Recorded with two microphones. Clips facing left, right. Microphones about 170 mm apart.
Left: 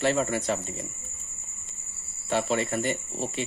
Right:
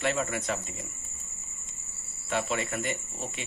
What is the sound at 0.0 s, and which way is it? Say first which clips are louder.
Speech: left 5 dB; 35° left (ahead or behind).